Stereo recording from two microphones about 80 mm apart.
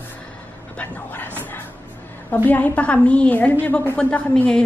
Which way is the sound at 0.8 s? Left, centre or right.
Left.